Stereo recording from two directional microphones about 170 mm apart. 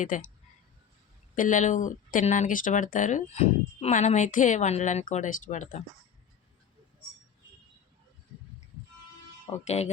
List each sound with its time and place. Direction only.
0.1 s speech: 50° left (ahead or behind)
1.4 s speech: 45° left (ahead or behind)
9.6 s speech: 40° left (ahead or behind)